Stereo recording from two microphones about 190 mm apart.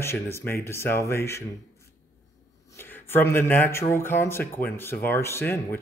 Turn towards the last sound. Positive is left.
turn(degrees=15)  # may be behind; listen again after turning